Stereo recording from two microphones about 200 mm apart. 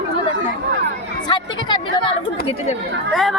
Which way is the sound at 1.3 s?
20° left (ahead or behind).